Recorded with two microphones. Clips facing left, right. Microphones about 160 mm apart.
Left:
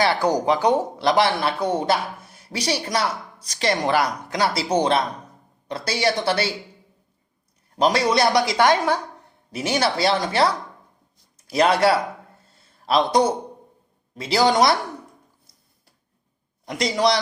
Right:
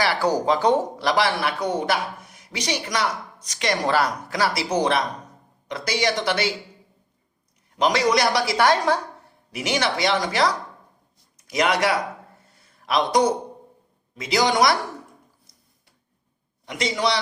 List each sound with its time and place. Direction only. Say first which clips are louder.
0.0 s speech: left 2 dB; 20° left (ahead or behind)
1.0 s a woman's voice: left 6 dB; 25° left (ahead or behind)
3.8 s a woman's voice: left 1 dB; 15° left (ahead or behind); by 6.5 s 30° left (ahead or behind)
7.8 s a woman's voice: left 1 dB; 30° left (ahead or behind); by 9.0 s 15° left (ahead or behind)
9.5 s a woman's voice: left 2 dB; 30° left (ahead or behind)
12.5 s a sound: left 3 dB; 30° left (ahead or behind)
14.2 s a woman's voice: left 2 dB; 30° left (ahead or behind)
16.6 s a woman's voice: left 3 dB; 35° left (ahead or behind)